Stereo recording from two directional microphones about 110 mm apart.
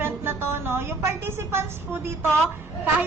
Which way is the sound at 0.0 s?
20° right (ahead or behind).